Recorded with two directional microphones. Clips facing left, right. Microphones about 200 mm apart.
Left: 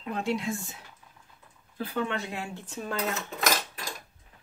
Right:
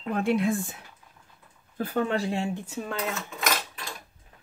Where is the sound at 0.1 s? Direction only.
55° right (ahead or behind).